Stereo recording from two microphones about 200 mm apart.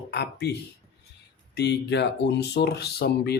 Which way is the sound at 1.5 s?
60° left (ahead or behind).